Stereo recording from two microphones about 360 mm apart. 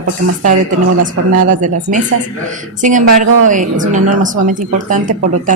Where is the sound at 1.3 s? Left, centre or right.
Right.